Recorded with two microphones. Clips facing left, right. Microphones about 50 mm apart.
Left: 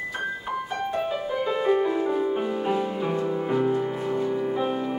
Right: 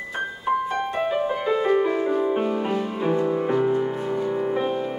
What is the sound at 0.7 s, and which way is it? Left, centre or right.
Music, right.